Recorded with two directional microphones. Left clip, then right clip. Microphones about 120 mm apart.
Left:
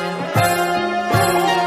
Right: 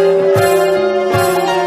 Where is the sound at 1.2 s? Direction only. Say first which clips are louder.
Right 3 dB; centre (ahead or behind).